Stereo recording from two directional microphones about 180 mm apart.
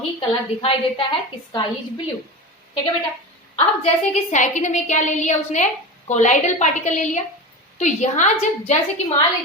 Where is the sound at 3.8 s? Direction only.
40° left (ahead or behind).